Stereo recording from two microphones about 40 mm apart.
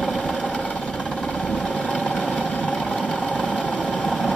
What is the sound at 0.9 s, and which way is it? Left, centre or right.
Vehicle, centre.